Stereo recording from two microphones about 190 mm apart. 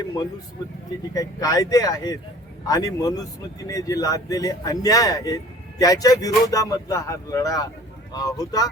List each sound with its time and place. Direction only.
1.1 s speech: 20° left (ahead or behind)